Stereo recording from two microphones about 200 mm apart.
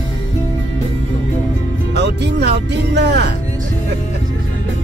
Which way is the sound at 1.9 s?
55° right (ahead or behind).